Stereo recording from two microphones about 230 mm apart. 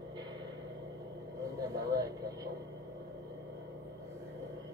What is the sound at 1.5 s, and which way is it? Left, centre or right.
Vehicle, centre.